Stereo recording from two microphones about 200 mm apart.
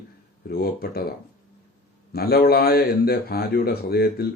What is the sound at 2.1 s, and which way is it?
A man's voice, 50° left (ahead or behind).